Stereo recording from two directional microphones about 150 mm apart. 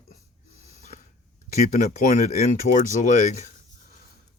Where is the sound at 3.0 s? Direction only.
60° left (ahead or behind).